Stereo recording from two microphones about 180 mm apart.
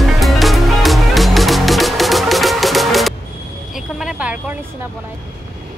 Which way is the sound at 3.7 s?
5° right (ahead or behind).